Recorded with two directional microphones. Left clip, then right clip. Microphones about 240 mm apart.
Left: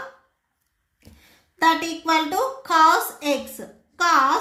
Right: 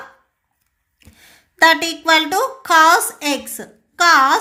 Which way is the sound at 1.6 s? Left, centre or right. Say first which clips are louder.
Right 6 dB; right.